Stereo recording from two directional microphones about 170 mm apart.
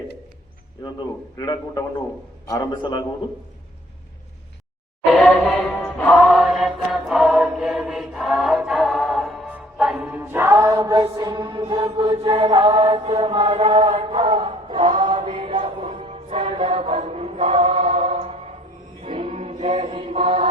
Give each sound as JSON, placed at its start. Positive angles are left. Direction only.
{"t": 0.9, "sound": "a man's voice", "side_deg": 25}
{"t": 5.1, "sound": "music", "side_deg": 0}
{"t": 11.0, "sound": "mantra", "side_deg": -25}
{"t": 13.7, "sound": "choir", "side_deg": -40}
{"t": 19.0, "sound": "music", "side_deg": -35}
{"t": 19.8, "sound": "mantra", "side_deg": -30}